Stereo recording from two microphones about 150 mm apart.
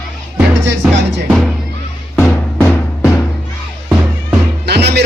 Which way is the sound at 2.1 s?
15° left (ahead or behind).